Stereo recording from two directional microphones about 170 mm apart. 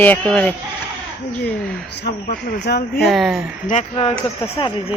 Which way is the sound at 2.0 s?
75° left (ahead or behind).